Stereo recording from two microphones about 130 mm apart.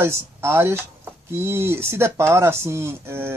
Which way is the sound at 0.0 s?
20° right (ahead or behind).